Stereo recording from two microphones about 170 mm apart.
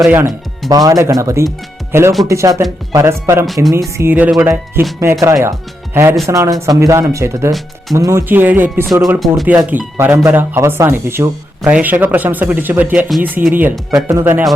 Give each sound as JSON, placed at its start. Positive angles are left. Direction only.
{"t": 0.1, "sound": "speech", "side_deg": -15}
{"t": 3.4, "sound": "speech", "side_deg": 0}
{"t": 3.9, "sound": "speech", "side_deg": -10}